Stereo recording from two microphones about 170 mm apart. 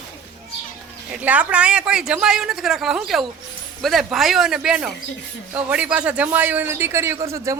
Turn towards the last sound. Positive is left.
turn(degrees=-20)  # may be behind; listen again after turning